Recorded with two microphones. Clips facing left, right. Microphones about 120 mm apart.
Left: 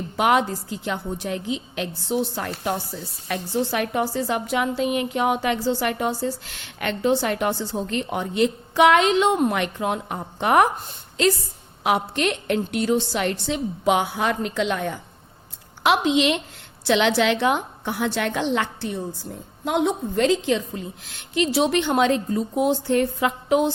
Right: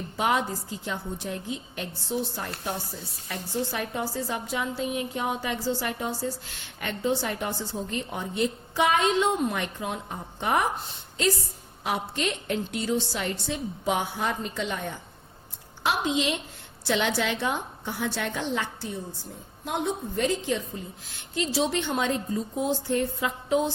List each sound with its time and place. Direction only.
0.2 s a woman's voice: 70° left (ahead or behind)
11.8 s a woman's voice: 70° left (ahead or behind)
19.6 s a woman's voice: 90° left
21.3 s a woman's voice: 70° left (ahead or behind)